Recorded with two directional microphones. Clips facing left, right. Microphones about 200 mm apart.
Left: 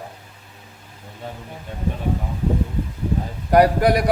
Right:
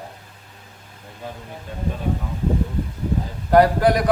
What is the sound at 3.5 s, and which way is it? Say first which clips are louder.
Speech: even; 15° left (ahead or behind).